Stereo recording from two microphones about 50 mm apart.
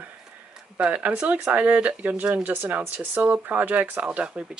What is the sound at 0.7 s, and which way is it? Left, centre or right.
Speech, right.